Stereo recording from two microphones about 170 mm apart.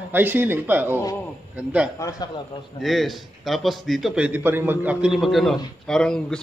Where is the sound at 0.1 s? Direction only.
10° right (ahead or behind).